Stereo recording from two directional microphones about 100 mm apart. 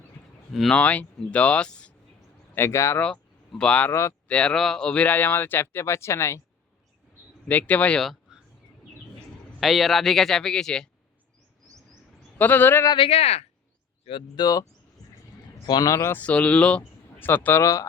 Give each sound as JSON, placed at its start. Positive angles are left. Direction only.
{"t": 0.5, "sound": "speech", "side_deg": 0}
{"t": 0.8, "sound": "speech", "side_deg": 15}
{"t": 2.6, "sound": "speech", "side_deg": 30}
{"t": 3.6, "sound": "speech", "side_deg": 10}
{"t": 7.4, "sound": "speech", "side_deg": 15}
{"t": 9.6, "sound": "speech", "side_deg": 0}
{"t": 12.4, "sound": "speech", "side_deg": 20}
{"t": 13.0, "sound": "speech", "side_deg": 90}
{"t": 14.0, "sound": "speech", "side_deg": 60}
{"t": 14.3, "sound": "speech", "side_deg": 40}
{"t": 16.1, "sound": "speech", "side_deg": 15}
{"t": 17.6, "sound": "speech", "side_deg": 35}